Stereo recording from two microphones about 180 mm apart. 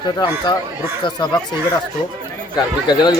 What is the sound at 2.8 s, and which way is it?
Speech, 25° left (ahead or behind).